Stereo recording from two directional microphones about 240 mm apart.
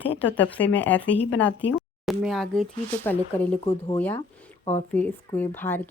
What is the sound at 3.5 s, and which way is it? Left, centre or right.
Speech, left.